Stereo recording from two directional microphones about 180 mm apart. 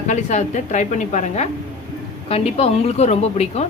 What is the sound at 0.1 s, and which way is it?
A woman's voice, 40° left (ahead or behind).